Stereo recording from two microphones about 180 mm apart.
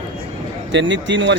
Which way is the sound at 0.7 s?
90° right.